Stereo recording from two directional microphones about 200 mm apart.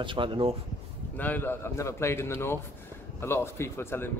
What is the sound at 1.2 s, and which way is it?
Speech, 10° left (ahead or behind).